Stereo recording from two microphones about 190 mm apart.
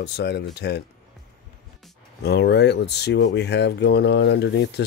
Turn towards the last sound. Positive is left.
turn(degrees=65)  # may be behind; listen again after turning